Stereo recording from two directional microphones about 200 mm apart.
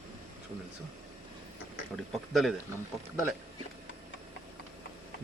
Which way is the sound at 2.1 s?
Centre (ahead or behind).